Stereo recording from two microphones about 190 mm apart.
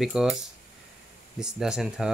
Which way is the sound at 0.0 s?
5° right (ahead or behind).